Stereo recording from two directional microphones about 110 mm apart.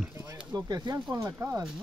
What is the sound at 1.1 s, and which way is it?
Speech, 30° right (ahead or behind).